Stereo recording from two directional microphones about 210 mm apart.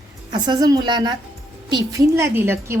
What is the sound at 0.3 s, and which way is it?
A woman's voice, 20° right (ahead or behind).